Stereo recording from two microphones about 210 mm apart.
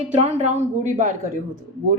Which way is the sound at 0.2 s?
30° right (ahead or behind).